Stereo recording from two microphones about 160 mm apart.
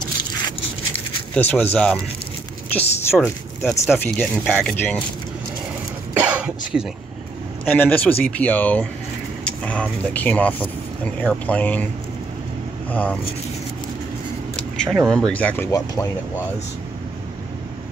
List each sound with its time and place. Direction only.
0.0 s a sound: 25° left (ahead or behind)
0.9 s a sound: 5° left (ahead or behind)
2.7 s speech: 15° left (ahead or behind)
6.1 s cough: 10° right (ahead or behind)
7.7 s speech: 10° left (ahead or behind)
12.9 s speech: 10° left (ahead or behind)
14.8 s speech: centre (ahead or behind); by 16.1 s 20° left (ahead or behind)